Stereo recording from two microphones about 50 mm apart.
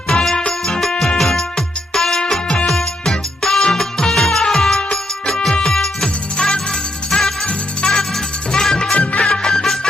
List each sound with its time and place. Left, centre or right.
0.1 s music: centre